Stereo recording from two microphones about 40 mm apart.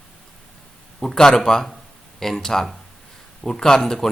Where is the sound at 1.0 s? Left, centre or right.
Centre.